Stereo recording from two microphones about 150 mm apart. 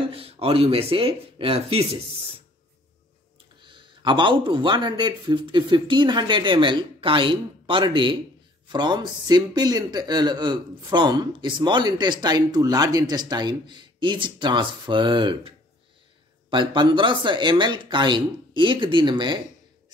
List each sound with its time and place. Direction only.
0.1 s a man's voice: 40° right (ahead or behind)
3.6 s a man's voice: 35° right (ahead or behind)